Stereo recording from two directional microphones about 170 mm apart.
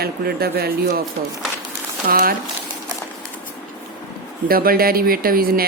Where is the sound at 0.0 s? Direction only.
65° right (ahead or behind).